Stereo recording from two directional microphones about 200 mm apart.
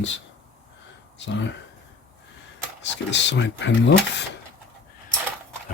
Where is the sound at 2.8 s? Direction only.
60° left (ahead or behind).